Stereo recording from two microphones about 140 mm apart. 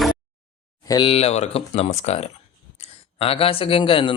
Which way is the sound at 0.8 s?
25° left (ahead or behind).